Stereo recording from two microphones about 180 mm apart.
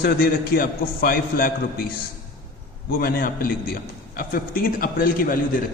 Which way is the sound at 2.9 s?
55° left (ahead or behind).